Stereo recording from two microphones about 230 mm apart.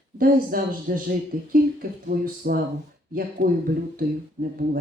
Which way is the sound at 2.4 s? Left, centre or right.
Right.